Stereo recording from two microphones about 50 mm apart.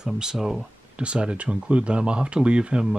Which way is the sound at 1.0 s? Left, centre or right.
Right.